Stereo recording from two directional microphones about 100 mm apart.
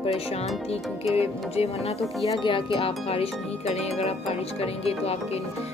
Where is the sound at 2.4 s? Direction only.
55° left (ahead or behind).